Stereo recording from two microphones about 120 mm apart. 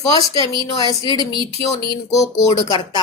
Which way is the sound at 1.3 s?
45° right (ahead or behind).